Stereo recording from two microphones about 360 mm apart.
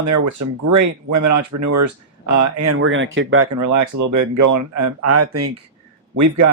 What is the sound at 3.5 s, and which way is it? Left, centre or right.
Speech, right.